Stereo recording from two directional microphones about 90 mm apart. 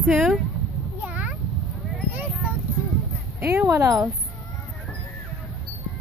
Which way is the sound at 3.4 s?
25° right (ahead or behind).